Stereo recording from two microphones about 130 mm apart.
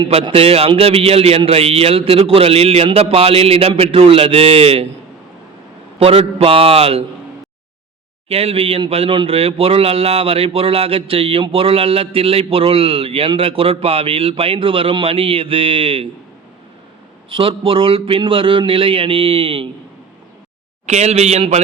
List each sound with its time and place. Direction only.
0.0 s speech: 45° right (ahead or behind)
6.0 s speech: 50° right (ahead or behind)
8.3 s speech: 50° right (ahead or behind)
17.2 s speech: 45° right (ahead or behind)
20.8 s speech: 60° right (ahead or behind)